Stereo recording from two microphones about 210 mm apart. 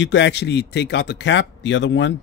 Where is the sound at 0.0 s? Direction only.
60° left (ahead or behind).